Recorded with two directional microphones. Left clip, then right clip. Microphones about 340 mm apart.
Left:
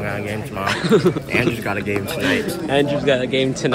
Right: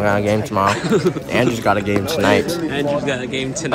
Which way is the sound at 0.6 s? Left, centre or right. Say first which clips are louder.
Left 4 dB; centre.